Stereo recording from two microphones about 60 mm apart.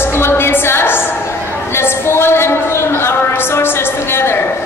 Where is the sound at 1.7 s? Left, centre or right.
Left.